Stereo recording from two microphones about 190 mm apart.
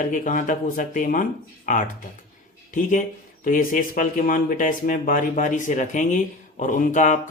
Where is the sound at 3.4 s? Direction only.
45° left (ahead or behind).